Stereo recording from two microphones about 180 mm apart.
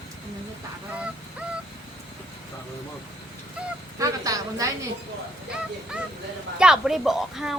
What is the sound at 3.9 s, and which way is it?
Speech, 20° right (ahead or behind).